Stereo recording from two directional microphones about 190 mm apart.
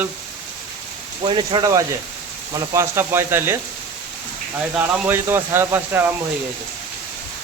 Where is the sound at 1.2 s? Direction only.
25° right (ahead or behind).